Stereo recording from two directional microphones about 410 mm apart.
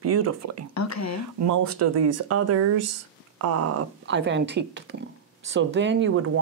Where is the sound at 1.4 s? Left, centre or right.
Right.